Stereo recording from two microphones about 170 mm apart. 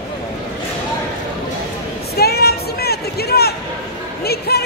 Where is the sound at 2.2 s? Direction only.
65° left (ahead or behind).